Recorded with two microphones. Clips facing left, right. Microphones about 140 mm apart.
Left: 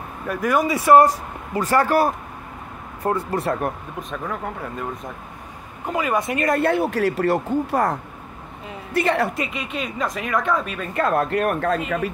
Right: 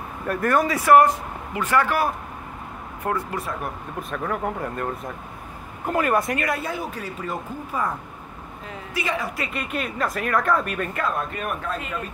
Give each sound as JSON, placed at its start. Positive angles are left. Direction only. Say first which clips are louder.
{"t": 0.3, "sound": "speech", "louder": "even", "side_deg": 5}
{"t": 0.6, "sound": "speech", "louder": "left 2 dB", "side_deg": 15}
{"t": 0.9, "sound": "speech", "louder": "left 1 dB", "side_deg": 35}
{"t": 4.1, "sound": "speech", "louder": "right 3 dB", "side_deg": 0}
{"t": 5.9, "sound": "speech", "louder": "right 1 dB", "side_deg": 0}
{"t": 6.2, "sound": "speech", "louder": "left 3 dB", "side_deg": 25}
{"t": 6.6, "sound": "a man's voice", "louder": "left 11 dB", "side_deg": 65}
{"t": 8.9, "sound": "speech", "louder": "left 7 dB", "side_deg": 65}
{"t": 9.5, "sound": "speech", "louder": "even", "side_deg": -5}
{"t": 11.1, "sound": "a man's voice", "louder": "left 7 dB", "side_deg": 75}